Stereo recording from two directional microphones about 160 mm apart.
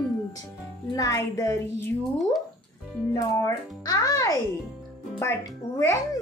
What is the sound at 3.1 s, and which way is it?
A child's voice, 20° left (ahead or behind).